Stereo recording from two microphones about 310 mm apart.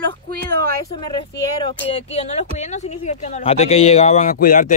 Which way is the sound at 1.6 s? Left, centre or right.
Centre.